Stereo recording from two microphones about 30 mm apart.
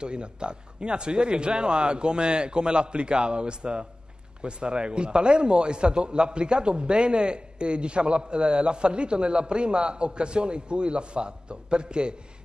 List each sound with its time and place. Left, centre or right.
0.0 s a man's voice: right